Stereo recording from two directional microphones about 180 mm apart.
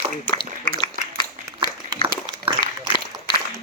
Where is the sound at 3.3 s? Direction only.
25° left (ahead or behind).